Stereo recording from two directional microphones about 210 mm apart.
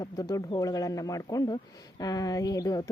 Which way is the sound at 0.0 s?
15° left (ahead or behind).